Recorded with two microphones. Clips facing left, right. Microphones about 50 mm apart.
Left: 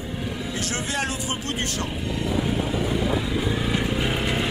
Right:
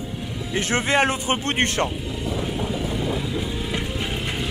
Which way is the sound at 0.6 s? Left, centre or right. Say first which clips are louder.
Right 9 dB; right.